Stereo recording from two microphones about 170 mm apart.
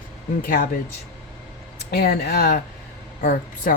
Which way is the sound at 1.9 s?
65° left (ahead or behind).